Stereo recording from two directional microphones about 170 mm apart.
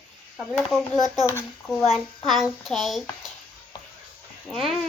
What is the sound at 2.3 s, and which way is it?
Speech, centre (ahead or behind).